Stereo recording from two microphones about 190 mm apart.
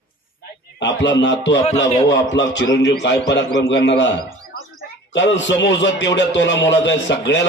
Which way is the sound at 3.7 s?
70° left (ahead or behind).